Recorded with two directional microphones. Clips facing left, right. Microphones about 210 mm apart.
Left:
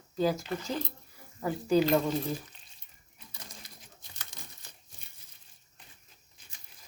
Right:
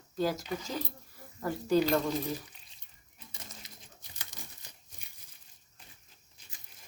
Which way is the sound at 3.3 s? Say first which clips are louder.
Left 1 dB; 25° right (ahead or behind).